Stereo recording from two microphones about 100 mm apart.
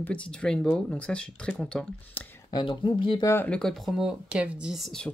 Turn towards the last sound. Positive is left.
turn(degrees=5)  # may be behind; listen again after turning